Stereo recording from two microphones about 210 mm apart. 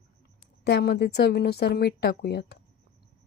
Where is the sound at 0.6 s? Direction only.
50° left (ahead or behind).